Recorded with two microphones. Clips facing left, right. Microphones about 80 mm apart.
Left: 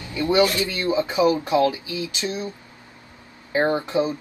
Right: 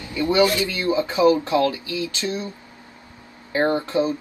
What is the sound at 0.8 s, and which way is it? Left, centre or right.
Speech, centre.